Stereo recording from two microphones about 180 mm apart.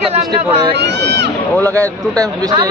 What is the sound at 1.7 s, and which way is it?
Speech, 15° right (ahead or behind).